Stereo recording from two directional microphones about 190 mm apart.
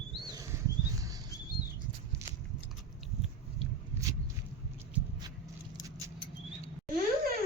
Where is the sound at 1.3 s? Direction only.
15° left (ahead or behind).